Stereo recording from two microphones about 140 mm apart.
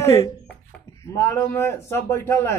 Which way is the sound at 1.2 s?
20° left (ahead or behind).